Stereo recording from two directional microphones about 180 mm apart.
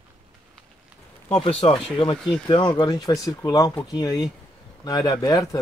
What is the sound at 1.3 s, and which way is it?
Speech, 30° left (ahead or behind).